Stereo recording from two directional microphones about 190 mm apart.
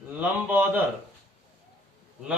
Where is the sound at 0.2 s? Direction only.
10° right (ahead or behind).